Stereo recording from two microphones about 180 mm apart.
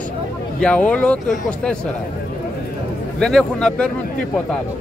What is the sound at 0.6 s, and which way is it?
Speech, 5° left (ahead or behind).